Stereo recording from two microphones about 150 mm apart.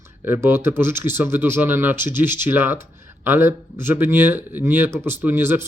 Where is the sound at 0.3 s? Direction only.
15° right (ahead or behind).